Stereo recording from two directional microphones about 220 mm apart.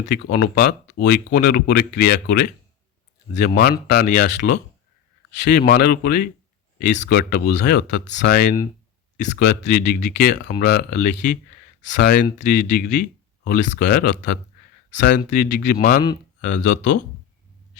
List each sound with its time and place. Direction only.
0.1 s speech: 45° left (ahead or behind)
3.3 s speech: 35° left (ahead or behind)